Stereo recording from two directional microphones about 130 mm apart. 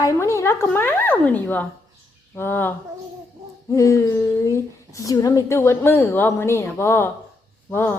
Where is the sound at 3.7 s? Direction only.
25° left (ahead or behind).